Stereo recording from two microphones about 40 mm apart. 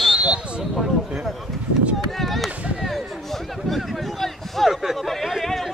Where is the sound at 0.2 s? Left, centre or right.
Right.